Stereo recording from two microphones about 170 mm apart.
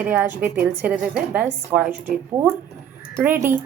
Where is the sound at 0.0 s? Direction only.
10° right (ahead or behind).